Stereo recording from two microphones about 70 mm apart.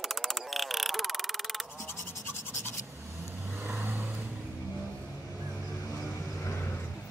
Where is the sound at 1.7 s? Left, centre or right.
Left.